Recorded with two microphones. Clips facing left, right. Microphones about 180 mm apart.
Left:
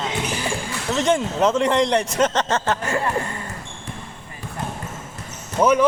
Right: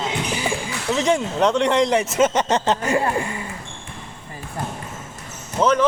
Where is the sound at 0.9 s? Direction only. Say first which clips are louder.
Even; centre (ahead or behind); by 3.1 s 20° right (ahead or behind).